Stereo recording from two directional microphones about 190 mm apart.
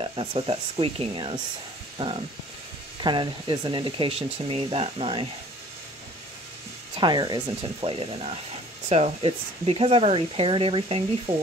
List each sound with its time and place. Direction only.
0.0 s speech: 25° right (ahead or behind)
3.0 s speech: 25° right (ahead or behind)
7.0 s speech: 20° right (ahead or behind)